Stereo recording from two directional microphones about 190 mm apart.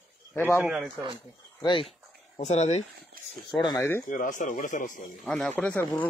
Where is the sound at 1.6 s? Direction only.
25° left (ahead or behind).